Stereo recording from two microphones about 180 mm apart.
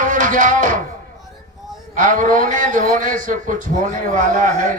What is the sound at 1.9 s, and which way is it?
A man's voice, 45° right (ahead or behind).